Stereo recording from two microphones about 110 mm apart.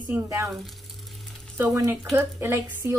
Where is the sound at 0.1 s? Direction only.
20° right (ahead or behind).